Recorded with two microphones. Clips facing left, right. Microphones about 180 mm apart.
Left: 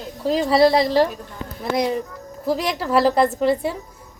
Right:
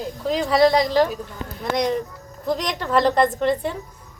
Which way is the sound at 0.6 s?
30° left (ahead or behind).